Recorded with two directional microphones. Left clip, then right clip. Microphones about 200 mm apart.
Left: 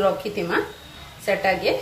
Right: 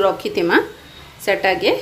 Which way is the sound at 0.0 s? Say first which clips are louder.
Right 5 dB; 60° right (ahead or behind).